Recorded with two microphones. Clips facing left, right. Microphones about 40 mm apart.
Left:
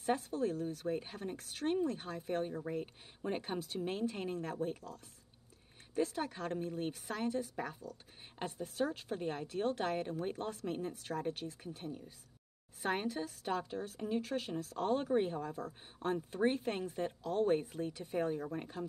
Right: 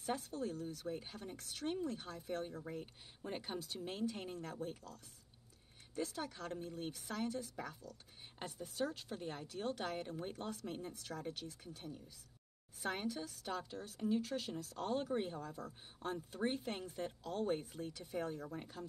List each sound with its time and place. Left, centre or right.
0.0 s speech: left